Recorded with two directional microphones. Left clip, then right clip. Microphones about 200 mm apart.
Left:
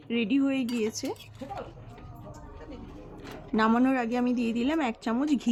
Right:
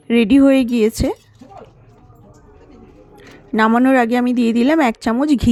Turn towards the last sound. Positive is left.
turn(degrees=-35)  # may be behind; listen again after turning